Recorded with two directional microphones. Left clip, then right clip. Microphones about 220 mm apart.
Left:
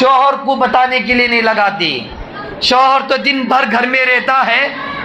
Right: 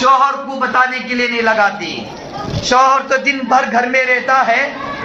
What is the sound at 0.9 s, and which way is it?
Speech, 50° left (ahead or behind).